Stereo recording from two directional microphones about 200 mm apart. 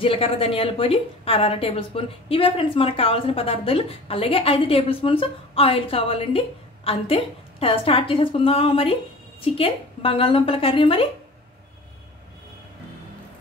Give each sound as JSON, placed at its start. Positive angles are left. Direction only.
{"t": 0.0, "sound": "a woman's voice", "side_deg": 25}